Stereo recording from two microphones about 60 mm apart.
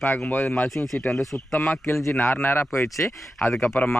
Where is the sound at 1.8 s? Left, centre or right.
Left.